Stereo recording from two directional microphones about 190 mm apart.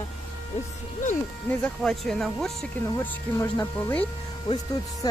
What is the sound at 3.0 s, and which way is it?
Speech, 15° left (ahead or behind).